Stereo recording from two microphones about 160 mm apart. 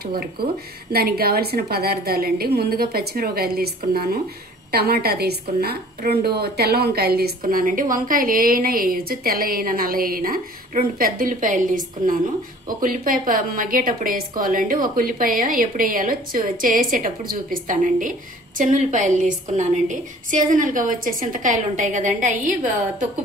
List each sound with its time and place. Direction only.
0.9 s a woman's voice: 70° right (ahead or behind); by 22.7 s 50° right (ahead or behind)